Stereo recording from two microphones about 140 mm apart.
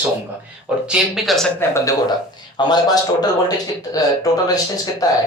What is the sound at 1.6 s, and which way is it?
A man's voice, 20° left (ahead or behind).